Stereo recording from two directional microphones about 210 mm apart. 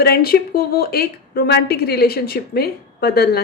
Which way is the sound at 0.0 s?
45° left (ahead or behind).